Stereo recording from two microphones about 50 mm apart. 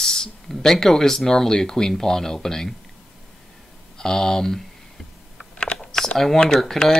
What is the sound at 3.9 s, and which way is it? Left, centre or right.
Speech, centre.